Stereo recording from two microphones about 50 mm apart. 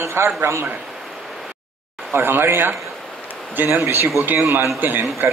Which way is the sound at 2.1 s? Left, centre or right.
Right.